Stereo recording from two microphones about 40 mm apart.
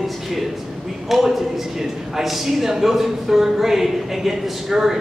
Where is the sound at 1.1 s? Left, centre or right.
Centre.